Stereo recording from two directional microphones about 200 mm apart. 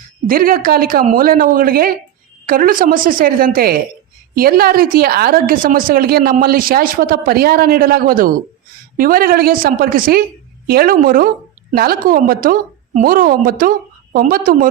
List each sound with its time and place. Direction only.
0.3 s a woman's voice: 45° right (ahead or behind)